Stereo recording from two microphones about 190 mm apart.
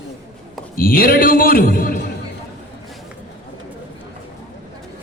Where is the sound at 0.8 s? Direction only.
50° left (ahead or behind).